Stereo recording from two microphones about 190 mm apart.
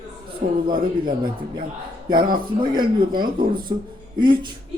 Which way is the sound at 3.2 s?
50° right (ahead or behind).